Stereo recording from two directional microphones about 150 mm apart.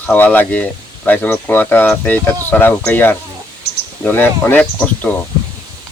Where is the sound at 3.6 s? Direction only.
90° left.